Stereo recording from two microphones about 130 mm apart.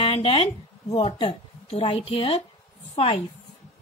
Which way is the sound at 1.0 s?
55° left (ahead or behind).